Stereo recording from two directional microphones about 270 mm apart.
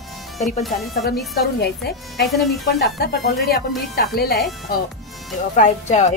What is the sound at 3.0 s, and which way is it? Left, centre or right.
A woman's voice, left.